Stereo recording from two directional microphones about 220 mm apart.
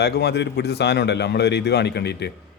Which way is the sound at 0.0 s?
50° left (ahead or behind).